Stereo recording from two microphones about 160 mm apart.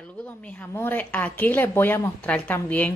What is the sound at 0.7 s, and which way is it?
Speech, 10° left (ahead or behind).